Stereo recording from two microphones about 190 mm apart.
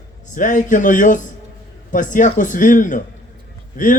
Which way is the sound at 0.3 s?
45° left (ahead or behind).